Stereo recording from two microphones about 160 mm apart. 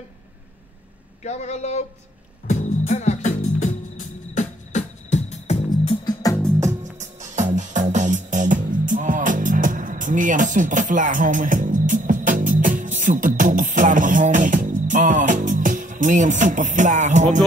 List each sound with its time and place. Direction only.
1.2 s speech: 45° left (ahead or behind)
2.4 s music: 45° left (ahead or behind)
5.7 s music: 25° left (ahead or behind)
6.6 s music: 50° right (ahead or behind)